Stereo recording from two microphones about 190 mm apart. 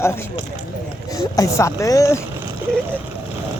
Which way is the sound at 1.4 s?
15° left (ahead or behind).